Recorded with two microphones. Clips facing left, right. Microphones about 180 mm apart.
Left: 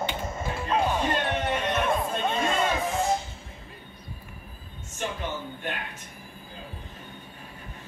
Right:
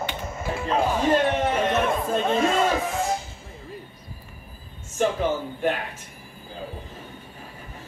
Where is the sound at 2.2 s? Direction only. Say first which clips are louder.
Right 6 dB; 5° right (ahead or behind).